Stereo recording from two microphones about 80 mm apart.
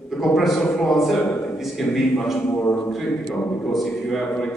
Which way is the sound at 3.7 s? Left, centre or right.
Centre.